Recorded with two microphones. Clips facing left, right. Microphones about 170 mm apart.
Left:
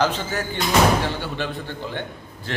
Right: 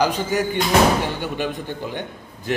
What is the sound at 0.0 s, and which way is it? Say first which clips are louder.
A man's voice: right 3 dB; 15° right (ahead or behind).